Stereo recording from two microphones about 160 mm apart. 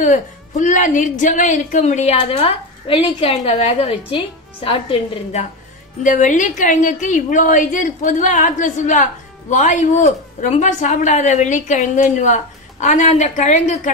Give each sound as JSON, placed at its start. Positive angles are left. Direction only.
{"t": 0.0, "sound": "a woman's voice", "side_deg": 50}
{"t": 6.0, "sound": "a woman's voice", "side_deg": 50}